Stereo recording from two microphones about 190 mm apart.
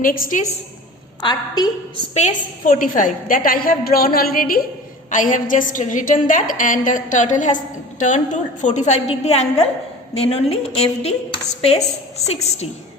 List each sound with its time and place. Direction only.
0.0 s a woman's voice: 50° left (ahead or behind)
1.2 s a woman's voice: 20° left (ahead or behind)
2.1 s a woman's voice: 40° left (ahead or behind)